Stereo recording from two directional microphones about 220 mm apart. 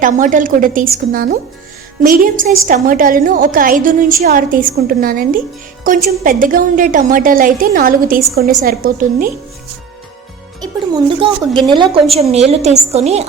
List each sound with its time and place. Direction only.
0.0 s a woman's voice: 35° right (ahead or behind)
10.6 s a woman's voice: 20° right (ahead or behind)